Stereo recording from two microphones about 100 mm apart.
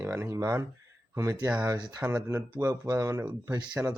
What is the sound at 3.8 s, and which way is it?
Speech, 20° right (ahead or behind).